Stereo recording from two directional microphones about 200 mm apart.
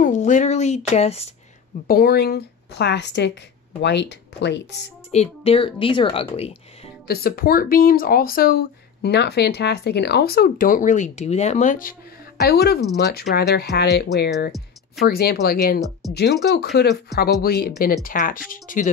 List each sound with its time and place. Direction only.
0.0 s speech: 40° left (ahead or behind)
1.9 s speech: 50° left (ahead or behind)
5.1 s speech: 30° left (ahead or behind)
7.1 s speech: 50° left (ahead or behind)
12.4 s speech: 55° left (ahead or behind)